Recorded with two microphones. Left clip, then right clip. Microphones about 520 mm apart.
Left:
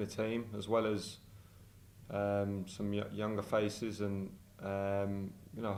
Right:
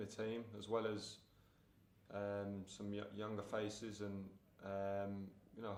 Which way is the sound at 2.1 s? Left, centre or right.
Left.